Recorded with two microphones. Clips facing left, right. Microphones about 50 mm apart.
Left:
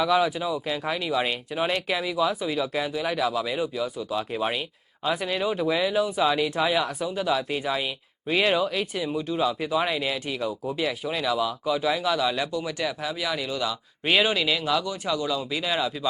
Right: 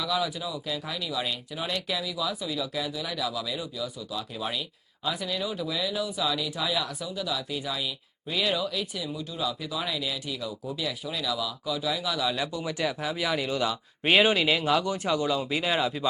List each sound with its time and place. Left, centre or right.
0.0 s speech: left
13.0 s speech: centre